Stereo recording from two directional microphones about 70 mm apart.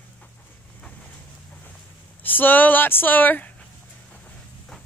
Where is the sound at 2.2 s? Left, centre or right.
Left.